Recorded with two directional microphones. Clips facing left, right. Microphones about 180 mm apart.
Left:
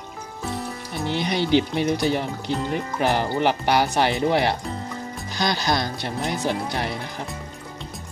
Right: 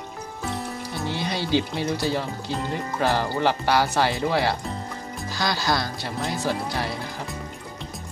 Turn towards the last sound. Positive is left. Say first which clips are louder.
# left 1 dB
turn(degrees=20)  # may be behind; listen again after turning